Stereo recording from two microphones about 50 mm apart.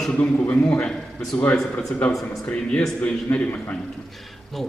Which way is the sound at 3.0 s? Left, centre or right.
Left.